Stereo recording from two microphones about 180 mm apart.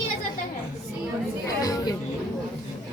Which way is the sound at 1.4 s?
20° left (ahead or behind).